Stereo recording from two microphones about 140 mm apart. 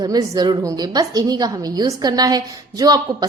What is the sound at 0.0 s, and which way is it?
A woman's voice, 30° right (ahead or behind).